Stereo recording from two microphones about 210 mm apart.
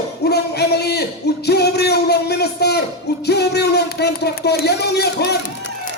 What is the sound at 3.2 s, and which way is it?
Speech, 50° left (ahead or behind).